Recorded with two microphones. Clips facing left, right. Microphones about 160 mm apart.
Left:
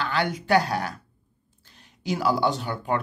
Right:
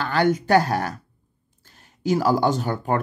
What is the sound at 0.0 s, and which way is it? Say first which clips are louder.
Speech: right 6 dB; 45° right (ahead or behind).